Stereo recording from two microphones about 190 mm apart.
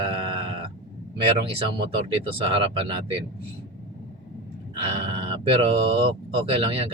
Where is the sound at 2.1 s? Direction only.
30° right (ahead or behind).